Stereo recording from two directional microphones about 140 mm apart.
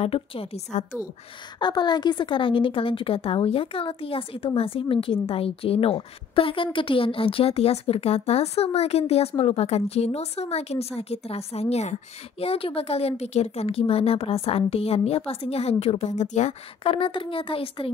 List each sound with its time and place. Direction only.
0.0 s a woman's voice: 45° left (ahead or behind)
1.6 s a woman's voice: 30° left (ahead or behind); by 16.5 s 55° left (ahead or behind)
16.8 s a woman's voice: 40° left (ahead or behind)